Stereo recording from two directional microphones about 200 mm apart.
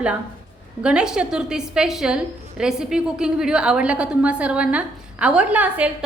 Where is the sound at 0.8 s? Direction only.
5° right (ahead or behind).